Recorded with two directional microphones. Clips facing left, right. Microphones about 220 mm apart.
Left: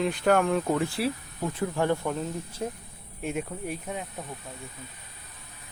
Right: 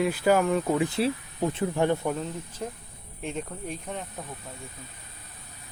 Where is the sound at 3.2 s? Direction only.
10° left (ahead or behind).